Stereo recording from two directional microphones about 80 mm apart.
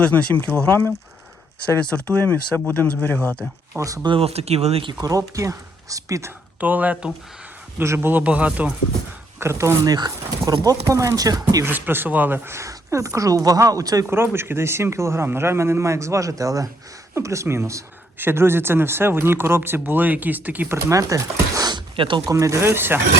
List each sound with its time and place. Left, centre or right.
0.0 s speech: centre
0.5 s speech: left
1.8 s speech: centre
3.8 s speech: right
6.6 s speech: centre
7.8 s a man's voice: right
9.4 s speech: right
9.8 s speech: right
11.6 s speech: right
14.1 s speech: right
20.7 s speech: right
21.7 s a sound: right
22.3 s speech: right